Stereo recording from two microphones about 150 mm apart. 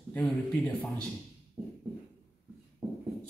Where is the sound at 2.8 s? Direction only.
5° right (ahead or behind).